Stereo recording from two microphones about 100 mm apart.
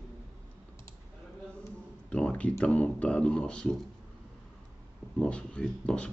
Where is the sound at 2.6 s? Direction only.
10° left (ahead or behind).